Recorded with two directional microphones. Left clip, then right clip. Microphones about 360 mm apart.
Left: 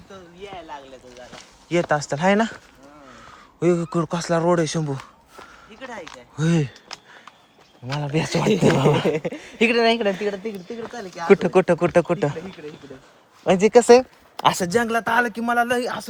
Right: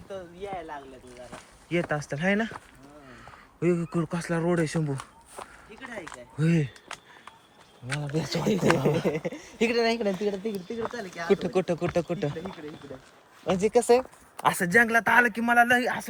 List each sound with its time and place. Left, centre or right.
1.7 s speech: centre
6.5 s speech: left
8.0 s speech: left
10.2 s speech: left
11.2 s speech: centre
13.4 s speech: left
13.7 s speech: left